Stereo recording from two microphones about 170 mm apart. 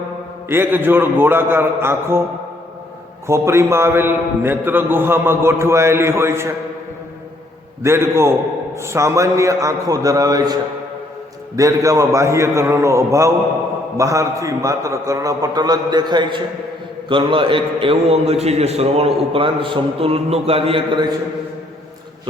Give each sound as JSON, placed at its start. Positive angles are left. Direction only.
{"t": 0.4, "sound": "a man's voice", "side_deg": -15}
{"t": 3.2, "sound": "a man's voice", "side_deg": -15}
{"t": 7.8, "sound": "a man's voice", "side_deg": -15}